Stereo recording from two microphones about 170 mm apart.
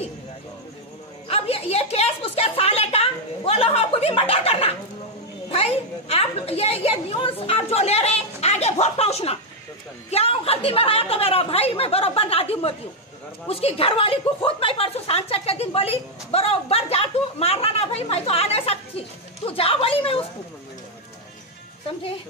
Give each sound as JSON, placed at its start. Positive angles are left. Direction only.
{"t": 1.3, "sound": "a woman's voice", "side_deg": 35}